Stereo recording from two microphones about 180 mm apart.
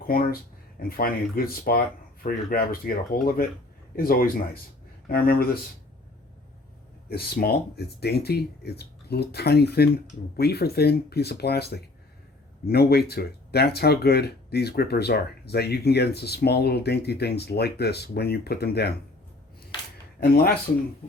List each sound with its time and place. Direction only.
0.8 s speech: 55° left (ahead or behind)
7.1 s speech: 60° left (ahead or behind)
19.7 s a sound: 25° left (ahead or behind)
20.1 s speech: 60° left (ahead or behind)
21.0 s speech: 40° left (ahead or behind)